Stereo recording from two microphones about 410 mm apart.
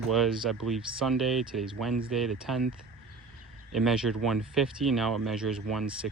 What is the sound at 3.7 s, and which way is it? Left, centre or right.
Speech, centre.